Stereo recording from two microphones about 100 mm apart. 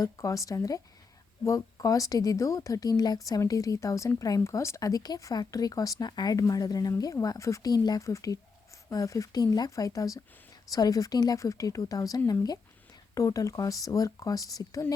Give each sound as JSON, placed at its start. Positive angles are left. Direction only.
{"t": 0.0, "sound": "speech", "side_deg": 35}